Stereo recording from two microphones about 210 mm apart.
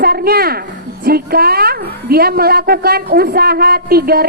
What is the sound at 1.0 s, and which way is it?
A woman's voice, 45° right (ahead or behind).